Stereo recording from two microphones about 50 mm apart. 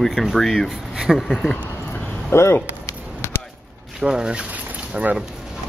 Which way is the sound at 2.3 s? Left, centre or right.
Left.